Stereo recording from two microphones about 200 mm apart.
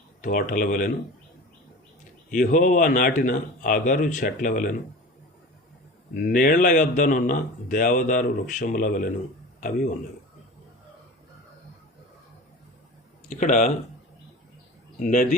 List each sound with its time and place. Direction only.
0.2 s speech: 40° left (ahead or behind)
2.3 s speech: 40° left (ahead or behind)
6.1 s a man's voice: 45° left (ahead or behind)
13.3 s speech: 40° left (ahead or behind)
14.9 s speech: 40° left (ahead or behind)